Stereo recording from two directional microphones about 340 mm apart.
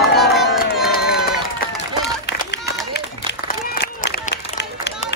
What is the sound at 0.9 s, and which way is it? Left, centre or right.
Run, left.